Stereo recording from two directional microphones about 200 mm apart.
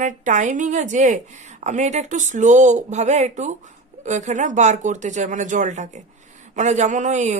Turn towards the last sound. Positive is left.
turn(degrees=-35)  # may be behind; listen again after turning